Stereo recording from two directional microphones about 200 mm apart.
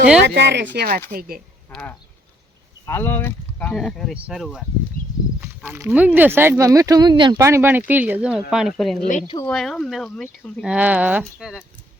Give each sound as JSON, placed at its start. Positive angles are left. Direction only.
{"t": 0.3, "sound": "speech", "side_deg": -60}
{"t": 1.7, "sound": "speech", "side_deg": 5}